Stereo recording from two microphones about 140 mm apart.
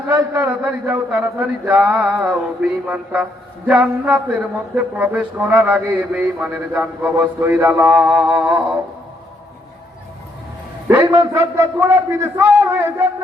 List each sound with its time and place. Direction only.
0.1 s speech: 10° right (ahead or behind)
10.8 s speech: 20° right (ahead or behind)